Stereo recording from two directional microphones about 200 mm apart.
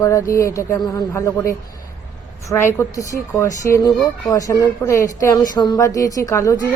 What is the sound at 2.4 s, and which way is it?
Speech, 15° left (ahead or behind).